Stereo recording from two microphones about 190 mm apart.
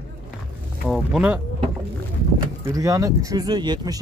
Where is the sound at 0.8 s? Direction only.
5° right (ahead or behind).